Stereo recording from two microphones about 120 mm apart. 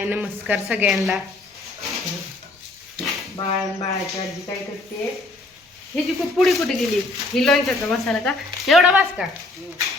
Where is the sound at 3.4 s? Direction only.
50° left (ahead or behind).